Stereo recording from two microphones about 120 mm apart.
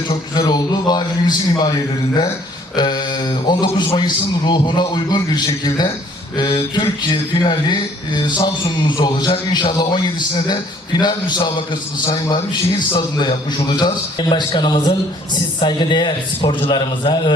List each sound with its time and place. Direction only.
0.1 s a man's voice: 35° left (ahead or behind)
2.7 s a man's voice: 35° left (ahead or behind)
12.9 s a man's voice: 35° left (ahead or behind)